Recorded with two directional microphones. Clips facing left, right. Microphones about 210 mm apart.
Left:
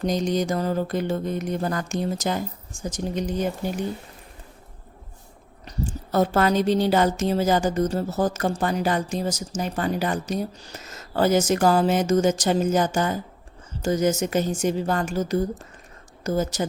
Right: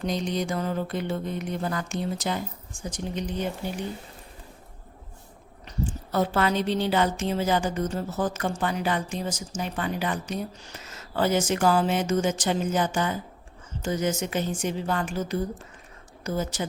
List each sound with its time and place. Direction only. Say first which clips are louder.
0.0 s music: left 5 dB; 40° left (ahead or behind)
5.6 s speech: left 1 dB; 40° left (ahead or behind)
16.2 s music: left 5 dB; 40° left (ahead or behind)